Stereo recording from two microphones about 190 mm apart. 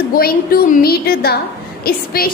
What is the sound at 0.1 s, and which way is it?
A woman's voice, 50° left (ahead or behind).